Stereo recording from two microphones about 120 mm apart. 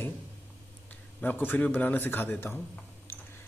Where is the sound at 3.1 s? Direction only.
20° left (ahead or behind).